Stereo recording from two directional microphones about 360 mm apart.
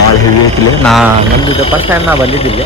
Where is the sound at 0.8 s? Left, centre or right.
Centre.